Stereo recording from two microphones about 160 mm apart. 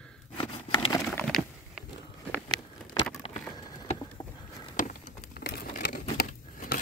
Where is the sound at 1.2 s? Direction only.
Centre (ahead or behind).